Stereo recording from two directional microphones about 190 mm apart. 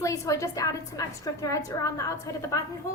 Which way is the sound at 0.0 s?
15° left (ahead or behind).